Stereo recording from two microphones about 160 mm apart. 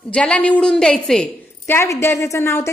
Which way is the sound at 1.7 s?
15° left (ahead or behind).